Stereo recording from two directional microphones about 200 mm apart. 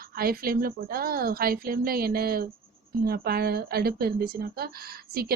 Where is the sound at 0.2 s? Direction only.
50° right (ahead or behind).